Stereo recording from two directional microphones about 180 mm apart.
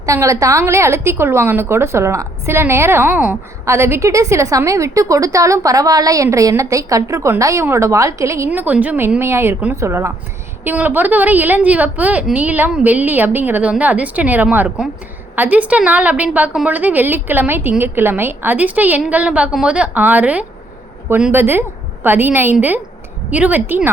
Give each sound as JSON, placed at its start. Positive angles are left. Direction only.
{"t": 0.0, "sound": "a woman's voice", "side_deg": -15}